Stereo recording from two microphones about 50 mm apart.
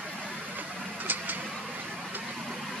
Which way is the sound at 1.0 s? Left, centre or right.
Right.